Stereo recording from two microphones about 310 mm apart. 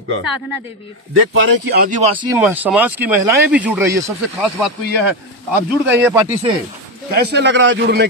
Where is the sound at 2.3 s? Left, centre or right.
Centre.